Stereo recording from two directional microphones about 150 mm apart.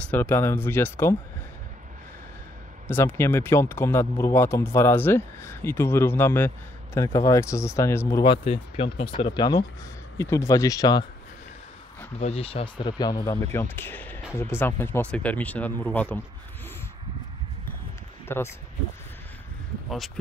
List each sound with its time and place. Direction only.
0.0 s speech: 10° left (ahead or behind)
2.9 s speech: 15° left (ahead or behind)
8.2 s speech: 35° left (ahead or behind)
12.2 s speech: 45° left (ahead or behind); by 16.2 s 10° left (ahead or behind)
18.3 s speech: 15° left (ahead or behind)